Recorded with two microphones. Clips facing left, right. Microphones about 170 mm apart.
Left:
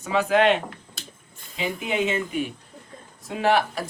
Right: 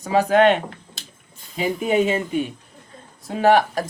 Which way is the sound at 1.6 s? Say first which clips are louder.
Right 6 dB; 40° right (ahead or behind).